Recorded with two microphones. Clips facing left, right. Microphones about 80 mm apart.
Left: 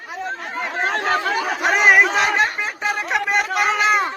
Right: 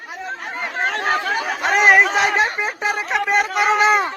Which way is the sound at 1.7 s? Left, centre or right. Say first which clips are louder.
Right 1 dB; centre.